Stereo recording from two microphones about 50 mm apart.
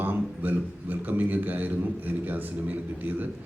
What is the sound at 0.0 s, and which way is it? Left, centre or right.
A man's voice, right.